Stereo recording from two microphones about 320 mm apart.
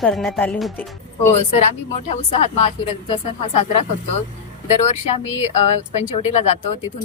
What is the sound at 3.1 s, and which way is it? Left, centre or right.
A woman's voice, centre.